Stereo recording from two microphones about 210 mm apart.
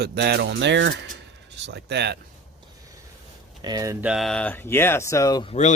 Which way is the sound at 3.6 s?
15° right (ahead or behind).